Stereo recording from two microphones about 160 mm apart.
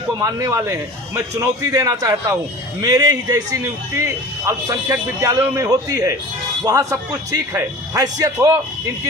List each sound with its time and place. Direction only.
0.2 s a man's voice: 20° right (ahead or behind)